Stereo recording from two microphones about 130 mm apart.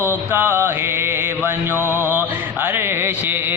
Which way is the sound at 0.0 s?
15° right (ahead or behind).